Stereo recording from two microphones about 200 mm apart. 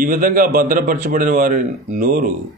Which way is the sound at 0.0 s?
45° right (ahead or behind).